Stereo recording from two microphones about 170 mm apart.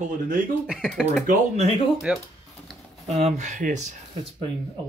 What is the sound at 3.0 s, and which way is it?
Speech, 40° right (ahead or behind).